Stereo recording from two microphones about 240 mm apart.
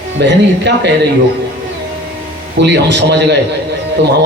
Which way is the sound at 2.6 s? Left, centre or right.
Right.